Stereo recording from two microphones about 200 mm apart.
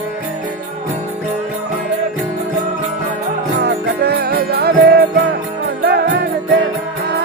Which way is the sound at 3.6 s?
55° right (ahead or behind).